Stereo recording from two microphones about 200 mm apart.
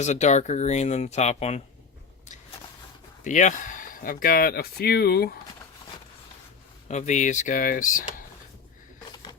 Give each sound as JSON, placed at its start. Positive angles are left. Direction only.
{"t": 0.0, "sound": "speech", "side_deg": 35}
{"t": 3.2, "sound": "speech", "side_deg": 40}
{"t": 6.8, "sound": "speech", "side_deg": 35}